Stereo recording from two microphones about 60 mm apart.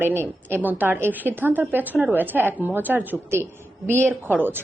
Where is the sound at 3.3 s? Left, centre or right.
Right.